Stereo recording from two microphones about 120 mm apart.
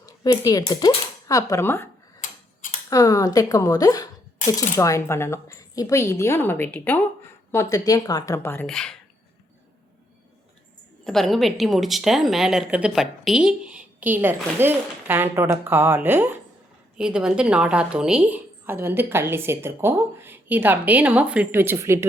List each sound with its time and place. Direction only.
0.0 s cutlery: 30° left (ahead or behind)
2.9 s a woman's voice: 30° left (ahead or behind); by 7.0 s 10° left (ahead or behind)
7.5 s a woman's voice: 30° left (ahead or behind)
8.6 s speech: 5° left (ahead or behind)
11.0 s a woman's voice: 5° left (ahead or behind); by 16.4 s 15° right (ahead or behind)
17.0 s a woman's voice: 5° right (ahead or behind); by 22.0 s 20° right (ahead or behind)